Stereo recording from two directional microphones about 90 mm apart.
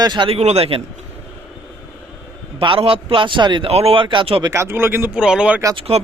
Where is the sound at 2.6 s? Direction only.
80° right.